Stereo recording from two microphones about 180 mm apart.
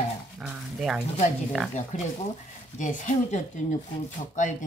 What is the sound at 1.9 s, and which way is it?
A woman's voice, 40° left (ahead or behind).